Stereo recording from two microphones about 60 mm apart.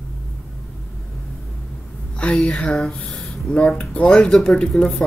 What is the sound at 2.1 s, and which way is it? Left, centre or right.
Speech, centre.